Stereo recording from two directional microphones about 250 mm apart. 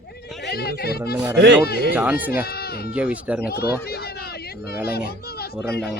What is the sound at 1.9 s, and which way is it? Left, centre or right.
Speech, centre.